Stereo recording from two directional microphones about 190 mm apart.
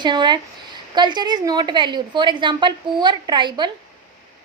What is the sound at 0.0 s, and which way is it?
A woman's voice, 25° right (ahead or behind).